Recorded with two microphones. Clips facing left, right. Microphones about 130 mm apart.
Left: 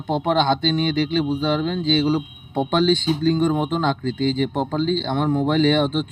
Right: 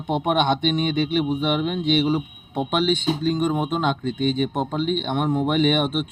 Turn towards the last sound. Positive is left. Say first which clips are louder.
# left 2 dB
turn(degrees=-10)  # may be behind; listen again after turning